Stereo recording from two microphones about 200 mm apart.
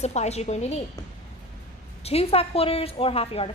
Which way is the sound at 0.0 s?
35° left (ahead or behind).